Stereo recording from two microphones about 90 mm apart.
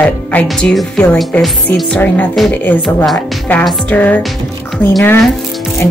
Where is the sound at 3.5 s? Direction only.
15° left (ahead or behind).